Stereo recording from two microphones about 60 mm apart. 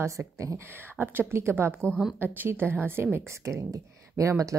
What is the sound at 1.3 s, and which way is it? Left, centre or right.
A woman's voice, right.